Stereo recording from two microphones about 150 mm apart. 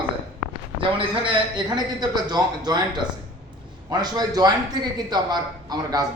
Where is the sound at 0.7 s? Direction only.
35° right (ahead or behind).